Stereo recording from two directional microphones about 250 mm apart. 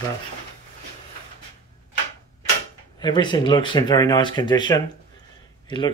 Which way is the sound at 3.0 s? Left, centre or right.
Centre.